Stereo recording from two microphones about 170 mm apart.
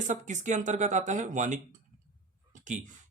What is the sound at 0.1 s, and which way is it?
Speech, 45° right (ahead or behind).